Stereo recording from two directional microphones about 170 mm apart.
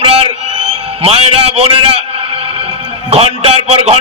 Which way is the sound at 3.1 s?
35° right (ahead or behind).